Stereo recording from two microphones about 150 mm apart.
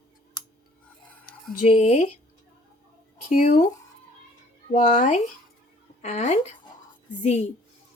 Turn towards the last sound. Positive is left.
turn(degrees=45)  # may be behind; listen again after turning